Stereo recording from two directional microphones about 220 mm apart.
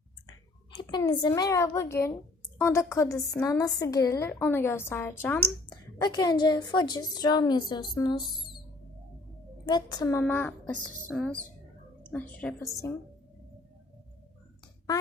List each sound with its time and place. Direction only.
0.8 s a woman's voice: 20° left (ahead or behind)
5.6 s a sound: 20° left (ahead or behind)
6.4 s a woman's voice: 20° left (ahead or behind)
8.2 s speech: centre (ahead or behind)
9.6 s a woman's voice: 20° left (ahead or behind)